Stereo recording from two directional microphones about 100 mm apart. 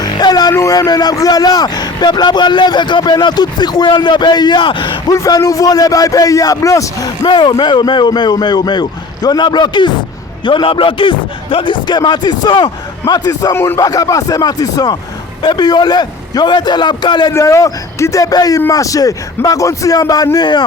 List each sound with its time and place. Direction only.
0.1 s a man's voice: 45° left (ahead or behind)
5.1 s a man's voice: 30° left (ahead or behind)
13.5 s speech: 25° left (ahead or behind)
13.8 s a man's voice: 35° left (ahead or behind)
17.3 s a man's voice: 30° left (ahead or behind); by 20.7 s 50° left (ahead or behind)